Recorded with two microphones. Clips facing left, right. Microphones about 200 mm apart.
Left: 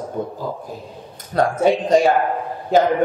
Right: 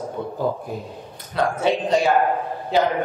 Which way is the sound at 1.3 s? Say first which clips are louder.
Left 4 dB; 45° left (ahead or behind).